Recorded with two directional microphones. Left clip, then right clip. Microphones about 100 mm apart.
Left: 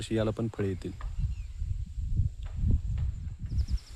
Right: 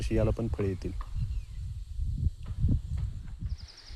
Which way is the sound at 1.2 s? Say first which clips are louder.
Even; 20° left (ahead or behind).